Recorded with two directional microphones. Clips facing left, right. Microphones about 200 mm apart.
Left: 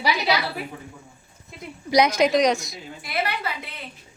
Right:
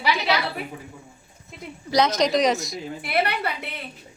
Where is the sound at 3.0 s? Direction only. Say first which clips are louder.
Right 3 dB; 60° right (ahead or behind).